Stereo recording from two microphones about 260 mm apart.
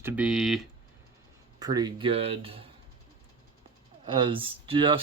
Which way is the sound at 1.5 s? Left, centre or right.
Centre.